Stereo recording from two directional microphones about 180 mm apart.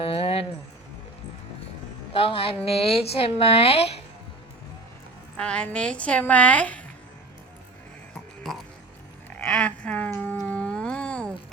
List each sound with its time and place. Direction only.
0.0 s music: 30° left (ahead or behind)
2.1 s speech: 30° left (ahead or behind)
5.4 s a woman's voice: 5° left (ahead or behind)
8.4 s music: centre (ahead or behind)
9.5 s cat: 5° left (ahead or behind)